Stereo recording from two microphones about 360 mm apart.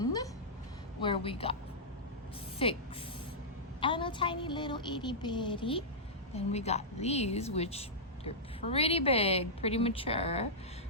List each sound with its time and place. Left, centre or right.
0.0 s a sound: centre
1.0 s a woman's voice: centre
2.6 s a woman's voice: centre
3.8 s a woman's voice: centre